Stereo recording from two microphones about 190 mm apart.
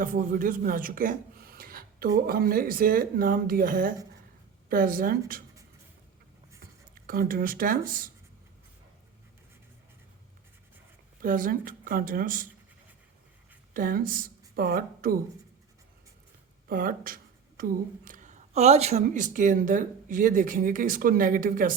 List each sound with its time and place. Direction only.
0.0 s a woman's voice: 45° right (ahead or behind)
7.1 s a woman's voice: 50° right (ahead or behind)
11.2 s a woman's voice: 45° right (ahead or behind)
13.7 s a woman's voice: 45° right (ahead or behind)
16.6 s a woman's voice: 50° right (ahead or behind)